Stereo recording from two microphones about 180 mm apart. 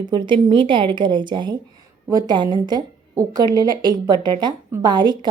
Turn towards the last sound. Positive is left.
turn(degrees=-25)  # may be behind; listen again after turning